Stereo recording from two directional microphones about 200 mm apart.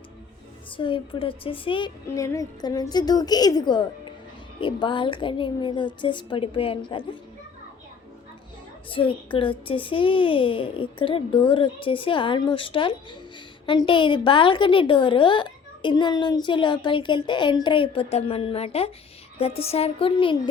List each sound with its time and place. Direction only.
0.8 s a woman's voice: 25° left (ahead or behind)
2.0 s a woman's voice: 15° left (ahead or behind)
8.9 s a woman's voice: 25° left (ahead or behind)